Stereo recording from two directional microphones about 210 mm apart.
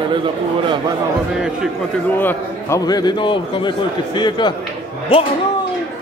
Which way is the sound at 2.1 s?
10° left (ahead or behind).